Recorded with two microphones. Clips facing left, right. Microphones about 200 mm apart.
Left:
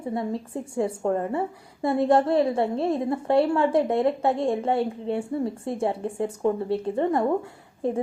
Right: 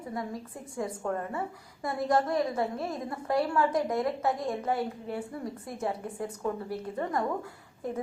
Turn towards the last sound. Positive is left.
turn(degrees=25)  # may be behind; listen again after turning